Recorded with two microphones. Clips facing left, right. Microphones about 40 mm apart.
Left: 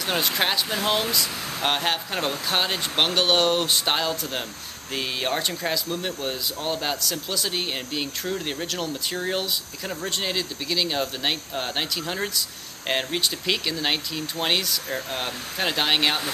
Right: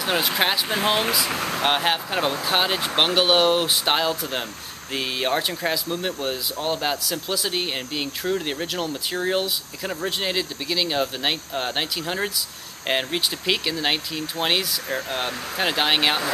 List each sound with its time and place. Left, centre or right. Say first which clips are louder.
0.0 s speech: right 2 dB; centre
1.3 s speech: right 6 dB; right
1.6 s speech: right 2 dB; centre